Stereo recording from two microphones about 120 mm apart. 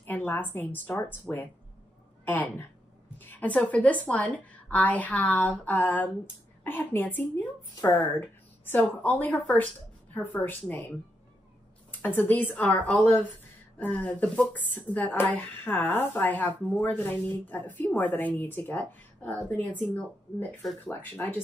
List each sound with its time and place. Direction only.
0.0 s a woman's voice: 15° left (ahead or behind)
10.4 s speech: 15° left (ahead or behind)